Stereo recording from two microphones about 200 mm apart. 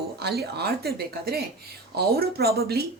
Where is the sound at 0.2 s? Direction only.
55° right (ahead or behind).